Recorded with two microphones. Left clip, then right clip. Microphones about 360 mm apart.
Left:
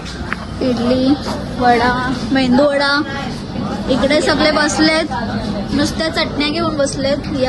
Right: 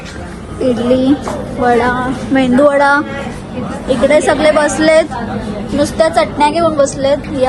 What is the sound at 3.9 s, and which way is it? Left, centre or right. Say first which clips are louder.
Chatter: right 4 dB; right.